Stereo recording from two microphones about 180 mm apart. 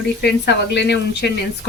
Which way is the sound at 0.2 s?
70° left (ahead or behind).